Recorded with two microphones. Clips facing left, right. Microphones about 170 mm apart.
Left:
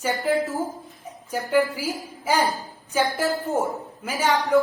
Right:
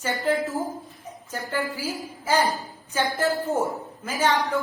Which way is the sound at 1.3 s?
15° left (ahead or behind).